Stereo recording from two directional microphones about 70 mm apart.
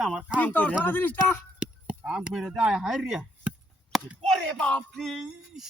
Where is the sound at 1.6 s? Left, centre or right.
Centre.